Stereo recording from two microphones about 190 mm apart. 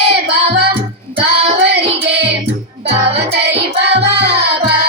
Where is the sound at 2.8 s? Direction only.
30° right (ahead or behind).